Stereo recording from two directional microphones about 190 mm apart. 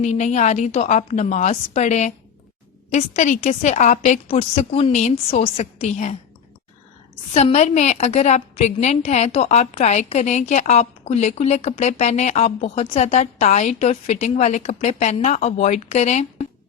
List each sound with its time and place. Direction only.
0.0 s a woman's voice: 35° left (ahead or behind)
7.3 s a woman's voice: 35° left (ahead or behind)